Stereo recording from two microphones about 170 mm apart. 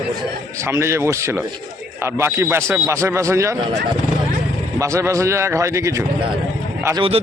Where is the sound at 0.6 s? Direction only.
15° right (ahead or behind).